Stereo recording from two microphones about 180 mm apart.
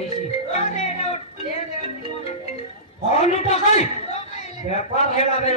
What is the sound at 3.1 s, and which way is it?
A man's voice, 40° left (ahead or behind).